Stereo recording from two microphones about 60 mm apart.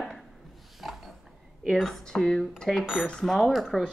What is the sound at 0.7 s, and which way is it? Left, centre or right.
Wood, centre.